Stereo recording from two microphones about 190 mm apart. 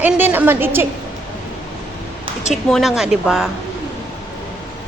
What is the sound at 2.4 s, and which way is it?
Speech, centre (ahead or behind).